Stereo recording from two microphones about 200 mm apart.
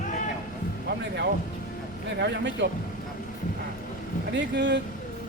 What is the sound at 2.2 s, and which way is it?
Speech, 60° right (ahead or behind).